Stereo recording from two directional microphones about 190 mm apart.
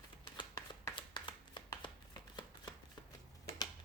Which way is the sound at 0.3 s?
20° left (ahead or behind).